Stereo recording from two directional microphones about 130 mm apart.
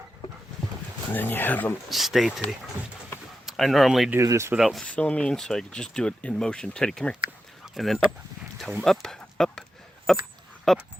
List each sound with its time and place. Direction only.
1.1 s speech: 15° left (ahead or behind)
1.9 s speech: centre (ahead or behind)
3.4 s speech: centre (ahead or behind)
4.1 s speech: 25° right (ahead or behind)
4.5 s speech: centre (ahead or behind)